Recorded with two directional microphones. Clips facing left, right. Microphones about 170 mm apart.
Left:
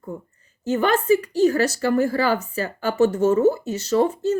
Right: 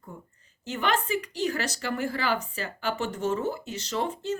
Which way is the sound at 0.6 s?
45° left (ahead or behind).